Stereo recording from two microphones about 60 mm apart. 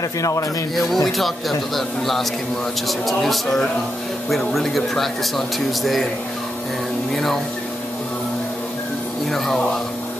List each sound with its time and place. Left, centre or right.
0.2 s speech: left
0.7 s speech: centre
7.1 s speech: centre